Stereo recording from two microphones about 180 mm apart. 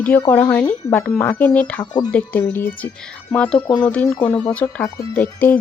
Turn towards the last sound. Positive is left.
turn(degrees=10)  # may be behind; listen again after turning